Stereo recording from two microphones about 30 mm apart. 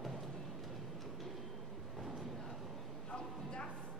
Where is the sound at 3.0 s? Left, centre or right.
Left.